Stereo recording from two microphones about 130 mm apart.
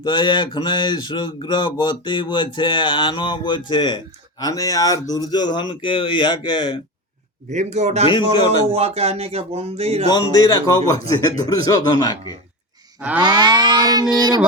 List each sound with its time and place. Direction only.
0.0 s speech: 35° left (ahead or behind)
7.5 s speech: 65° right (ahead or behind)
8.0 s speech: 40° left (ahead or behind)
8.7 s speech: 50° right (ahead or behind)
10.3 s speech: 30° left (ahead or behind)
13.0 s cattle: 10° right (ahead or behind)
13.2 s child singing: 35° right (ahead or behind)